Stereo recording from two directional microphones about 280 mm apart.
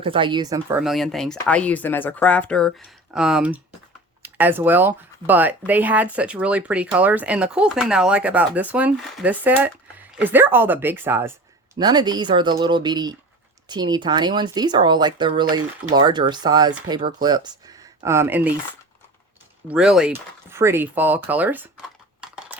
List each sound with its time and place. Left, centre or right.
0.0 s speech: centre
0.8 s speech: centre
19.6 s speech: centre